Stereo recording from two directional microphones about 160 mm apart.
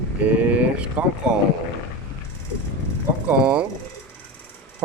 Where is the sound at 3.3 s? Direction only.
5° right (ahead or behind).